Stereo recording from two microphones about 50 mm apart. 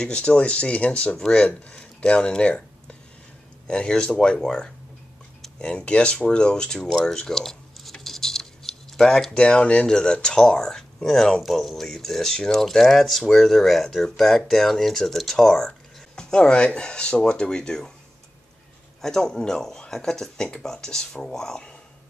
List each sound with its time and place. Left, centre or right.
0.0 s speech: left
18.9 s speech: centre